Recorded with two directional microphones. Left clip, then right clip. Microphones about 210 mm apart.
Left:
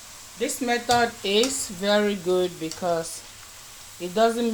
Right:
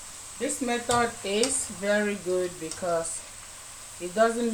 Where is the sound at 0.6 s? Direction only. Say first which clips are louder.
Left 4 dB; 40° left (ahead or behind).